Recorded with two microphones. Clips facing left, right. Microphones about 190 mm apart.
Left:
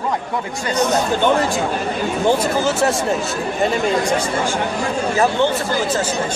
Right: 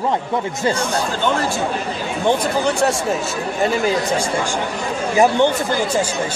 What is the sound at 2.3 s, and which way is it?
A man's voice, 5° left (ahead or behind).